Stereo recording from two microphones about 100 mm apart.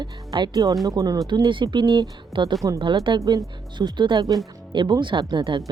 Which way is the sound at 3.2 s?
35° right (ahead or behind).